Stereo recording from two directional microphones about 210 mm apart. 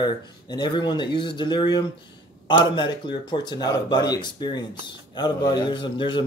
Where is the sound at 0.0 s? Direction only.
20° left (ahead or behind).